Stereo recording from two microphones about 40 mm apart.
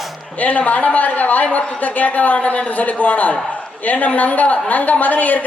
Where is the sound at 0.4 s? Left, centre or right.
Left.